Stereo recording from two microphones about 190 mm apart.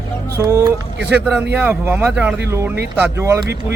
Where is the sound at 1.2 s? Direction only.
5° right (ahead or behind).